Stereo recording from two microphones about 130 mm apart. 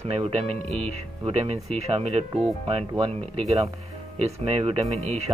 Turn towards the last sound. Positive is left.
turn(degrees=-55)  # may be behind; listen again after turning